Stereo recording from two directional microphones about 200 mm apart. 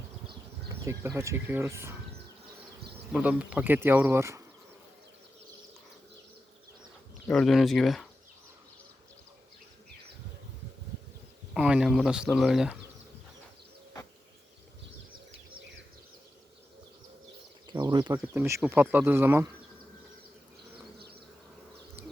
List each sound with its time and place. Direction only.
0.7 s speech: 15° right (ahead or behind)
3.1 s speech: 5° right (ahead or behind)
7.3 s speech: centre (ahead or behind)
11.5 s speech: 5° right (ahead or behind)
17.7 s bird: 20° right (ahead or behind)
18.2 s speech: 10° right (ahead or behind)